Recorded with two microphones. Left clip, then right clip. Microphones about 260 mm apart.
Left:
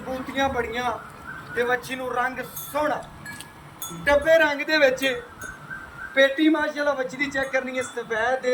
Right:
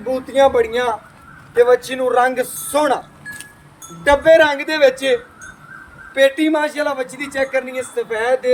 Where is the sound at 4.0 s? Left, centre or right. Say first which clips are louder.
Right 7 dB; right.